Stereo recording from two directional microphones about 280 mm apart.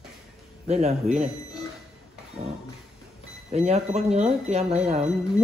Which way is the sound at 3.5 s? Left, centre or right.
Right.